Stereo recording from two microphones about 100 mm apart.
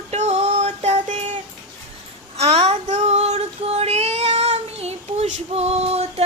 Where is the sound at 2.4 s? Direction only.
90° right.